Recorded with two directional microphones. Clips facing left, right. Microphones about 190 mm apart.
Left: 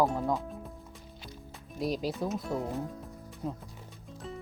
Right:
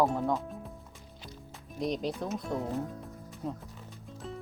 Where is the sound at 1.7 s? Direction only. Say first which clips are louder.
Even; 5° left (ahead or behind).